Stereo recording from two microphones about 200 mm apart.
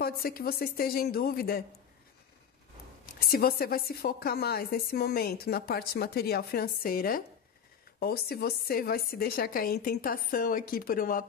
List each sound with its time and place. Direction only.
0.0 s a woman's voice: 50° left (ahead or behind)
3.2 s a woman's voice: 50° left (ahead or behind)